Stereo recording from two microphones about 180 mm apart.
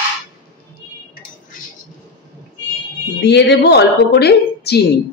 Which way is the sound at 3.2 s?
70° left (ahead or behind).